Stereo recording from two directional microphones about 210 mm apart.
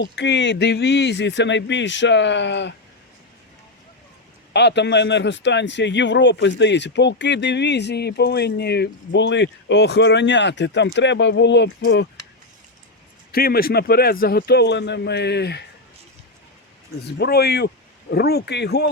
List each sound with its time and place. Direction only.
0.0 s a man's voice: 55° left (ahead or behind)
4.5 s a man's voice: 55° left (ahead or behind)
13.3 s a man's voice: 45° left (ahead or behind)
17.1 s a man's voice: 50° left (ahead or behind)